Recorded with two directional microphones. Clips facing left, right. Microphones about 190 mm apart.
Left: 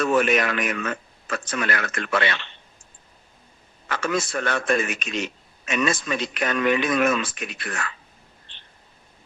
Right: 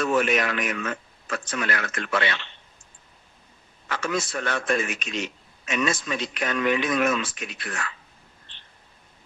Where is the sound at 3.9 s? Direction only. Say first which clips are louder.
Left 2 dB; 55° left (ahead or behind).